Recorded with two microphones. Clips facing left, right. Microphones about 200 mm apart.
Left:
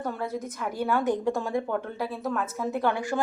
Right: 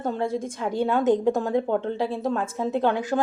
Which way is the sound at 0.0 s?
25° right (ahead or behind).